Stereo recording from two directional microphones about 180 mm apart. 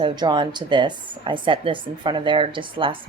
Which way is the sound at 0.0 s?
25° right (ahead or behind).